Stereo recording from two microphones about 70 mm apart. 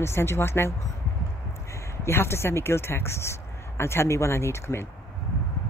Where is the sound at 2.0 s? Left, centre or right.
Left.